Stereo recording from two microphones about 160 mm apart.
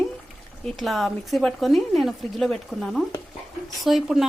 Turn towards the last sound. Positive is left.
turn(degrees=0)  # may be behind; listen again after turning